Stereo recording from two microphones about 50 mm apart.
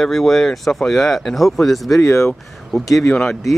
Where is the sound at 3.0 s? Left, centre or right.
Centre.